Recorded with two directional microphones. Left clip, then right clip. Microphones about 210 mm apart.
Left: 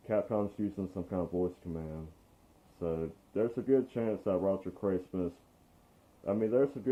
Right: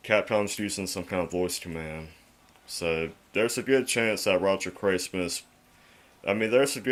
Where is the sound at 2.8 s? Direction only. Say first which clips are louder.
Right 7 dB; 20° right (ahead or behind).